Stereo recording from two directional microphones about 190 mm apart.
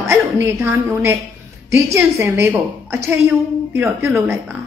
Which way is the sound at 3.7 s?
15° right (ahead or behind).